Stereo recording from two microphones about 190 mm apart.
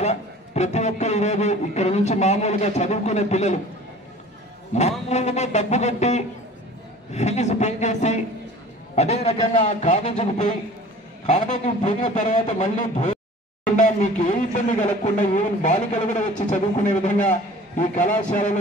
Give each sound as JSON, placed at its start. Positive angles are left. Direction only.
{"t": 0.0, "sound": "a man's voice", "side_deg": 35}
{"t": 4.7, "sound": "a man's voice", "side_deg": 35}